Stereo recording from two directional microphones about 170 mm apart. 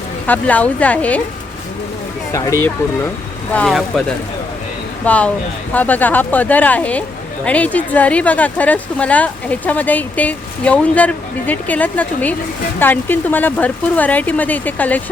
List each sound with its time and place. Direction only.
0.3 s speech: 10° left (ahead or behind)
2.3 s speech: 20° left (ahead or behind)
3.5 s speech: 5° left (ahead or behind)
5.0 s speech: 10° left (ahead or behind)